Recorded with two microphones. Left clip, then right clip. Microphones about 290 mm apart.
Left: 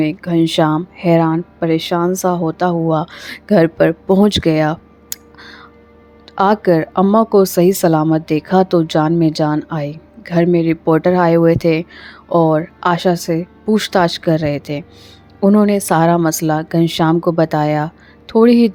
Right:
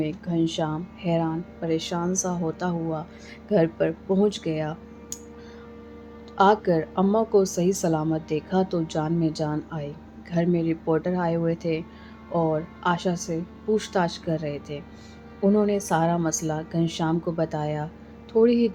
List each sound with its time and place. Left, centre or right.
0.0 s a woman's voice: left